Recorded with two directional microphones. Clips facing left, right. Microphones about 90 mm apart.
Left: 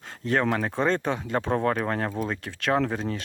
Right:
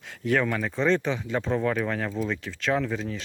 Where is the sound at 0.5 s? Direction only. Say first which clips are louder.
Even; 45° left (ahead or behind).